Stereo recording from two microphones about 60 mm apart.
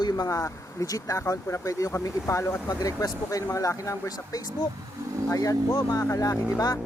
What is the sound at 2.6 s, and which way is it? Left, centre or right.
Speech, left.